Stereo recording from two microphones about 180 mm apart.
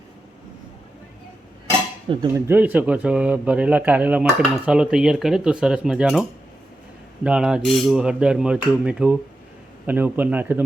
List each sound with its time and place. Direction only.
2.0 s speech: 20° right (ahead or behind); by 6.2 s 5° right (ahead or behind)
7.3 s speech: 5° right (ahead or behind)